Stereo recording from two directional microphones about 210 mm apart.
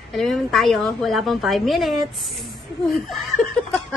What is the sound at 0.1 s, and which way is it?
A woman's voice, centre (ahead or behind).